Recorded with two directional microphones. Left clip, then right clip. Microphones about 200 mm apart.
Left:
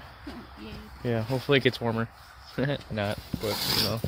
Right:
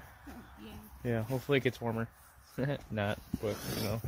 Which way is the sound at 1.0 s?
Centre (ahead or behind).